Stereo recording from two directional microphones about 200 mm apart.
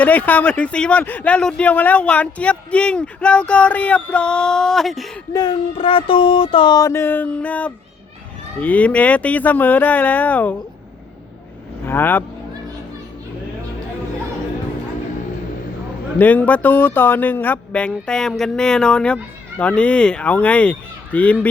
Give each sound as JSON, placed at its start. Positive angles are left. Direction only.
{"t": 0.0, "sound": "speech", "side_deg": 10}
{"t": 5.3, "sound": "a sound", "side_deg": 20}
{"t": 8.6, "sound": "speech", "side_deg": 5}
{"t": 11.9, "sound": "speech", "side_deg": 10}
{"t": 16.1, "sound": "speech", "side_deg": 10}